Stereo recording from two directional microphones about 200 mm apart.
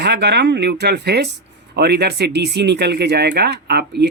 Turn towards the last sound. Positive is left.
turn(degrees=-55)  # may be behind; listen again after turning